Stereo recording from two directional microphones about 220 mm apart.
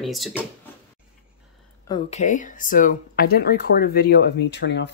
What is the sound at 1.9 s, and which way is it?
Speech, 30° left (ahead or behind).